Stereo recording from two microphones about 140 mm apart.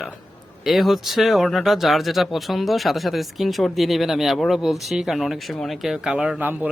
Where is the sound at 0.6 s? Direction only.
Centre (ahead or behind).